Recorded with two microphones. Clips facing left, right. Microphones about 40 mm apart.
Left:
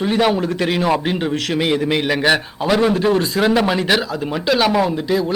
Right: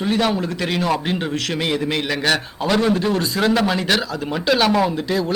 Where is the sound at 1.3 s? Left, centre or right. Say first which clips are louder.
Left 3 dB; left.